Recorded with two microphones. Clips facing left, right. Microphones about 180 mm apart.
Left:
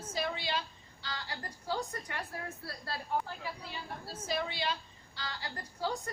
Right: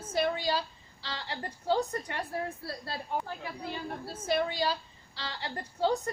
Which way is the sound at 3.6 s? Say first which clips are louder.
Right 6 dB; 50° right (ahead or behind).